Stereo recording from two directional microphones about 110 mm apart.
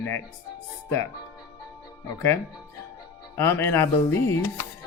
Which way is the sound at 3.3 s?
20° left (ahead or behind).